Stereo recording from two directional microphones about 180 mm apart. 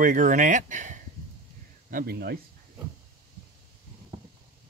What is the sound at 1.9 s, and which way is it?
Speech, 55° right (ahead or behind).